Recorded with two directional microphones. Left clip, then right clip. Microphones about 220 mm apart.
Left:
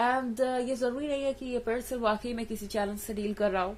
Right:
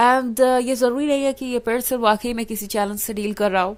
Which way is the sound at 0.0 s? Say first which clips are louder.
Right 12 dB; 45° right (ahead or behind).